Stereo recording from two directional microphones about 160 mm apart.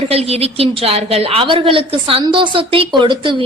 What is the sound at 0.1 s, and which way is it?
A woman's voice, 40° right (ahead or behind).